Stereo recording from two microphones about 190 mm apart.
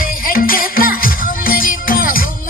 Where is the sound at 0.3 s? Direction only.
50° left (ahead or behind).